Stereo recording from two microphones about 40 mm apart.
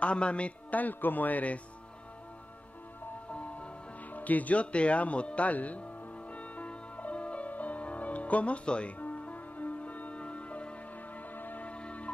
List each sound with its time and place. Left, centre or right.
0.0 s speech: left
3.3 s music: left
4.1 s speech: left
6.3 s music: left
11.3 s music: left
11.6 s music: left